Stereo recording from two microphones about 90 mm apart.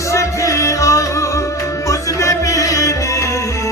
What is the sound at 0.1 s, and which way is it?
Music, 35° left (ahead or behind).